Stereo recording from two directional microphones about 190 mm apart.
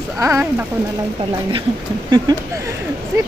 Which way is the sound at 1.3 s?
25° right (ahead or behind).